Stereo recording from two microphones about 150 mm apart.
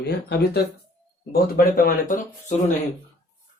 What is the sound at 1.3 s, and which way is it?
Speech, 70° left (ahead or behind).